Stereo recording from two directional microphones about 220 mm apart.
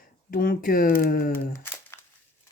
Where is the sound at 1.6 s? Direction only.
10° left (ahead or behind).